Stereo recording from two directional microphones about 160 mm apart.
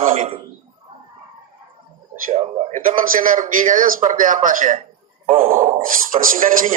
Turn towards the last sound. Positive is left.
turn(degrees=-60)  # may be behind; listen again after turning